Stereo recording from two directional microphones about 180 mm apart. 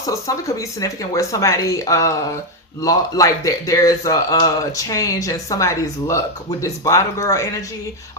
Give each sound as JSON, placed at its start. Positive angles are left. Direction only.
{"t": 0.1, "sound": "speech", "side_deg": 15}